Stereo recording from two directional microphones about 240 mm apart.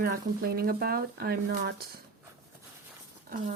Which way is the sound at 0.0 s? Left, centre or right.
Right.